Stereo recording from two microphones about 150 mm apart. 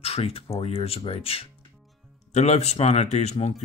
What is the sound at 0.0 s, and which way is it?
Speech, 40° left (ahead or behind).